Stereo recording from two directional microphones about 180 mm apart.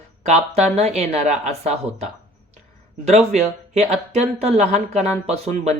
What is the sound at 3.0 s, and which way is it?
Speech, 35° right (ahead or behind).